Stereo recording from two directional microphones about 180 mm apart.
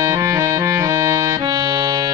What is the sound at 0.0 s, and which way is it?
Music, 15° right (ahead or behind).